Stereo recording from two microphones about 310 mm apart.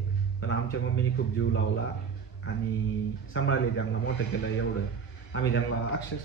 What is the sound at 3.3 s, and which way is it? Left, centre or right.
Speech, left.